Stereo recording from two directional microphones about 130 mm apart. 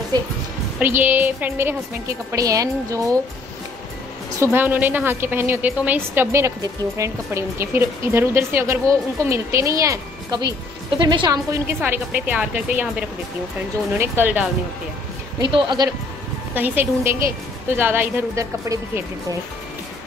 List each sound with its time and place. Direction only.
0.7 s a woman's voice: 15° right (ahead or behind)
2.3 s a woman's voice: 25° right (ahead or behind)
4.4 s a woman's voice: 15° right (ahead or behind); by 11.3 s 35° right (ahead or behind)
11.5 s a woman's voice: 15° right (ahead or behind)
13.9 s a woman's voice: 15° right (ahead or behind)
15.4 s speech: 35° right (ahead or behind)
16.5 s a woman's voice: 15° right (ahead or behind)